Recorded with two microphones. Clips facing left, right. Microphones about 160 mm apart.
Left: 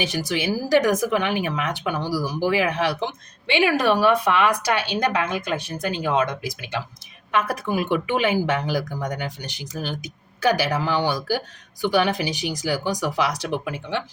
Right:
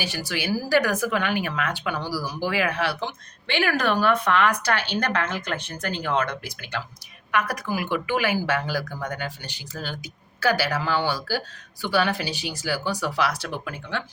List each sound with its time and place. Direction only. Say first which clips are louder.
0.0 s speech: left 5 dB; 20° left (ahead or behind)